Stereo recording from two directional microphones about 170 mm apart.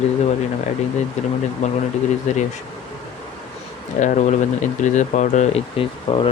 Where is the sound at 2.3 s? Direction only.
45° left (ahead or behind).